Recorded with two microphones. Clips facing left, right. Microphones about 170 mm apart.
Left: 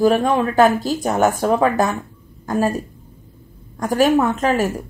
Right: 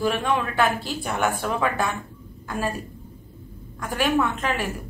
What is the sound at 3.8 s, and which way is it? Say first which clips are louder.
A woman's voice: left 7 dB; 40° left (ahead or behind).